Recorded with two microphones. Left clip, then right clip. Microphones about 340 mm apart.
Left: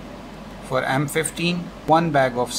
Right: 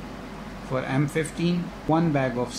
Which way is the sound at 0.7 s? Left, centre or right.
Left.